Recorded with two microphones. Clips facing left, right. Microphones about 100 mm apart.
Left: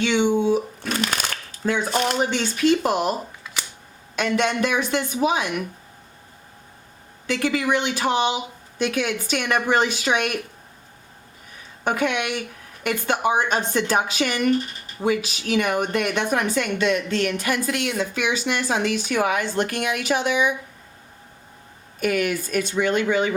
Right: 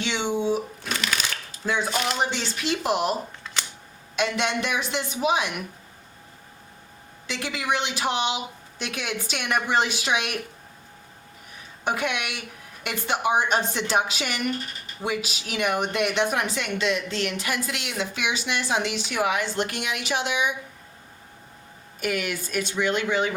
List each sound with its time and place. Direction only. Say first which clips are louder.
0.1 s speech: left 4 dB; 55° left (ahead or behind)
3.6 s camera: even; 10° left (ahead or behind)
4.1 s speech: left 3 dB; 45° left (ahead or behind)
7.3 s speech: left 6 dB; 50° left (ahead or behind)
11.9 s speech: left 4 dB; 50° left (ahead or behind)
22.0 s speech: left 5 dB; 45° left (ahead or behind)